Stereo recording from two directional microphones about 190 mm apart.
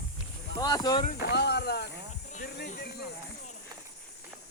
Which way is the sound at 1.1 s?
60° left (ahead or behind).